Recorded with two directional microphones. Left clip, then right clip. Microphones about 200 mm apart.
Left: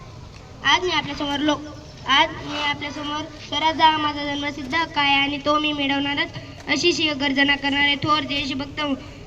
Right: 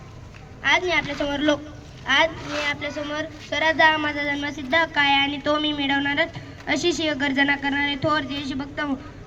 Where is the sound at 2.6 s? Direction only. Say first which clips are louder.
Left 2 dB; 20° right (ahead or behind).